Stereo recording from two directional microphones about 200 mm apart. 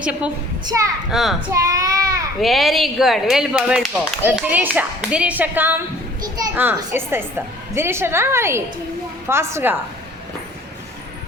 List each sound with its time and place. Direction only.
0.0 s a woman's voice: 5° right (ahead or behind)
1.6 s child singing: 15° right (ahead or behind)
2.4 s a woman's voice: centre (ahead or behind)